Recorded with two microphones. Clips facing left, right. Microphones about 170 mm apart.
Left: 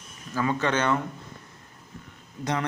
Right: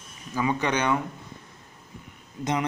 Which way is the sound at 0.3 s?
15° right (ahead or behind).